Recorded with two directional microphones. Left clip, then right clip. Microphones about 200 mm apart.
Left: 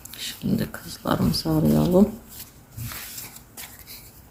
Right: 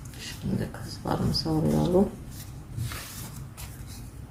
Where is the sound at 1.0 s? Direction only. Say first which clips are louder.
Left 4 dB; 35° left (ahead or behind).